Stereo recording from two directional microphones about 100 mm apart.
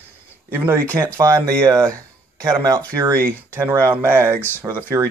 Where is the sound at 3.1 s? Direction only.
25° right (ahead or behind).